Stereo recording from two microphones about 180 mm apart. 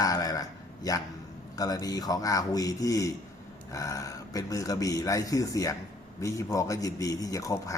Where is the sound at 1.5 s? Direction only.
20° left (ahead or behind).